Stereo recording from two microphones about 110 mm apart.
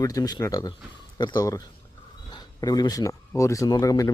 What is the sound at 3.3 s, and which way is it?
Speech, 25° left (ahead or behind).